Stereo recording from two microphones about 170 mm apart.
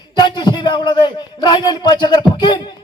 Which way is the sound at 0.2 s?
25° left (ahead or behind).